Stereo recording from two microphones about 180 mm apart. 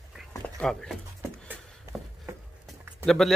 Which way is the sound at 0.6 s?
5° left (ahead or behind).